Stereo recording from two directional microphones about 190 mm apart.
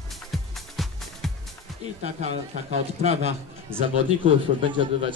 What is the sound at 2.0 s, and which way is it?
A man's voice, 35° right (ahead or behind).